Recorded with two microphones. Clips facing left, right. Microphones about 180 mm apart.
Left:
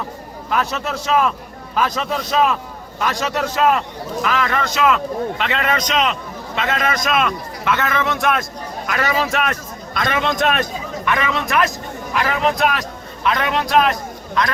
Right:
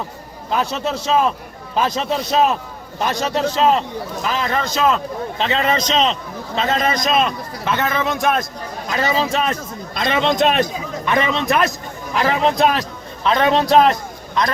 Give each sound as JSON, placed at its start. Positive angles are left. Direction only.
{"t": 0.5, "sound": "a man's voice", "side_deg": -30}